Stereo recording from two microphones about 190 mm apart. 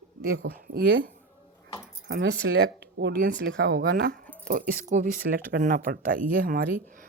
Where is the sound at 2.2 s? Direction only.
65° right (ahead or behind).